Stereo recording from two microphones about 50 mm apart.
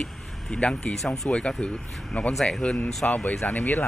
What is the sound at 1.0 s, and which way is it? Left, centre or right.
Speech, centre.